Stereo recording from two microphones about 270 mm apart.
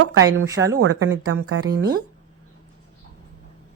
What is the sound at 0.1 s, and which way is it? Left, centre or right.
Speech, right.